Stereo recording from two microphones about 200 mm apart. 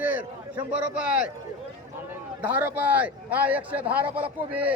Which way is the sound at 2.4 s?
10° right (ahead or behind).